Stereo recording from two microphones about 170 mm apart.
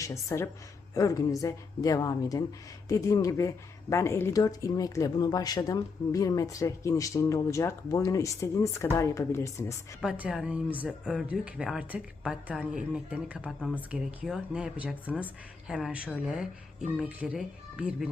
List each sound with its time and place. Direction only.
0.0 s a woman's voice: 20° left (ahead or behind)
10.0 s speech: 5° right (ahead or behind)
13.6 s speech: 5° left (ahead or behind)